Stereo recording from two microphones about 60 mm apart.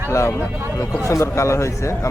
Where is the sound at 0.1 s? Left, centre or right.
Left.